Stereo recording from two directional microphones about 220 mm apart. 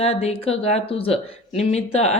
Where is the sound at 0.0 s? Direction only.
30° left (ahead or behind).